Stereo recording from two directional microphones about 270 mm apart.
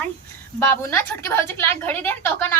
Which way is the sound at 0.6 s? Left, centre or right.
Centre.